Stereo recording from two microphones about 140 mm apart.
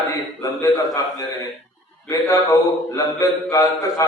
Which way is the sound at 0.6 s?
25° left (ahead or behind).